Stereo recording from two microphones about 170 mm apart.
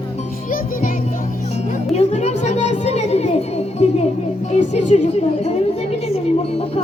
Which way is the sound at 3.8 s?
40° left (ahead or behind).